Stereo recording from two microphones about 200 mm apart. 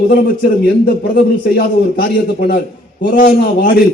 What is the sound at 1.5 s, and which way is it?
A man's voice, 50° left (ahead or behind).